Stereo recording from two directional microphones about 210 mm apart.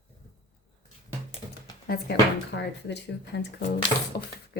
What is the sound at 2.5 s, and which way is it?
Speech, 55° left (ahead or behind).